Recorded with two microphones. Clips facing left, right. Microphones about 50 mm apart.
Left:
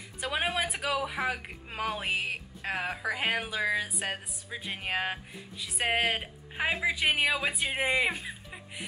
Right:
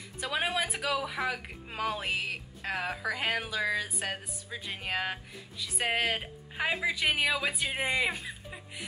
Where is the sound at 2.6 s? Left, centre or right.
Centre.